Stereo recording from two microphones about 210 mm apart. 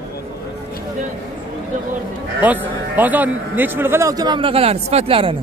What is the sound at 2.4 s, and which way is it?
A man's voice, 10° right (ahead or behind).